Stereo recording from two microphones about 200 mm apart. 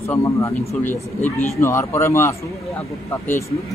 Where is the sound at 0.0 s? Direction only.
15° left (ahead or behind).